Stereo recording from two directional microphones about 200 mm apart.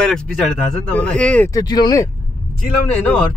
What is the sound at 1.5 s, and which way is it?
Speech, 20° left (ahead or behind).